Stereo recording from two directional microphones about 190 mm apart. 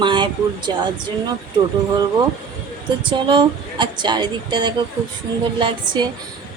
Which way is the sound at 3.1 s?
25° right (ahead or behind).